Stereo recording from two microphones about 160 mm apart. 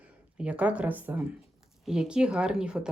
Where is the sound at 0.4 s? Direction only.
10° right (ahead or behind).